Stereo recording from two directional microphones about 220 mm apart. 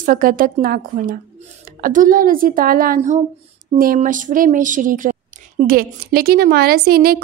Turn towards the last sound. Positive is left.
turn(degrees=-45)  # may be behind; listen again after turning